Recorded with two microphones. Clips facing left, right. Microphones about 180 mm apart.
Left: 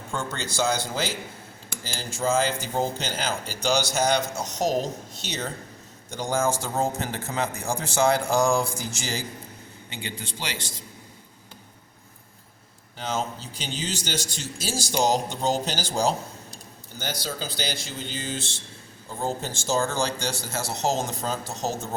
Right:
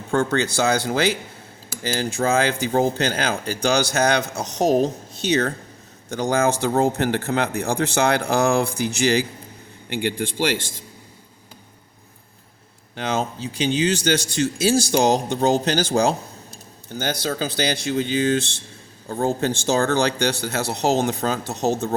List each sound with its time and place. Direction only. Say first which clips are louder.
0.1 s speech: right 11 dB; 65° right (ahead or behind)
13.0 s speech: right 5 dB; 65° right (ahead or behind)